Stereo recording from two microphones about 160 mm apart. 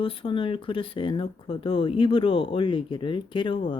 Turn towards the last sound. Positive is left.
turn(degrees=30)  # may be behind; listen again after turning